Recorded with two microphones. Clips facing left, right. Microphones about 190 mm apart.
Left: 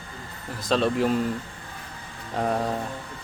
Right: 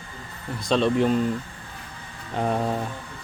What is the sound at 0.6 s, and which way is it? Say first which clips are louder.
Speech: right 2 dB; centre (ahead or behind).